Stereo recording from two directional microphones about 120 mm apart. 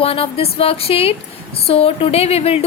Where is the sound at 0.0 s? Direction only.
55° left (ahead or behind).